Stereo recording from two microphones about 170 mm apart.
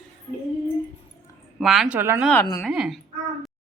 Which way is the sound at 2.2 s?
10° left (ahead or behind).